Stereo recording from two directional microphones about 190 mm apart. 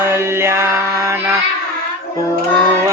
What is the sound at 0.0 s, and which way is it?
Chant, 10° right (ahead or behind).